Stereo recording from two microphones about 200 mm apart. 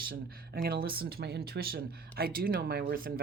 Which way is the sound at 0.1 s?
50° right (ahead or behind).